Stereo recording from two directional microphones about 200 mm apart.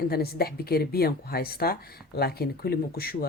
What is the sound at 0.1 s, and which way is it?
Speech, 50° left (ahead or behind).